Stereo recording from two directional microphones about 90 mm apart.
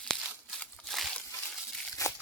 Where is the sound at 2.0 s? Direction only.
35° left (ahead or behind).